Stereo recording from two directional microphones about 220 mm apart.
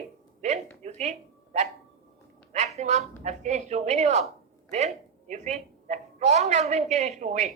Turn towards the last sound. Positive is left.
turn(degrees=-30)  # may be behind; listen again after turning